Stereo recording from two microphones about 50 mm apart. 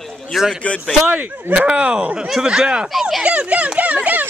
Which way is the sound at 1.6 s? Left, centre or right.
Centre.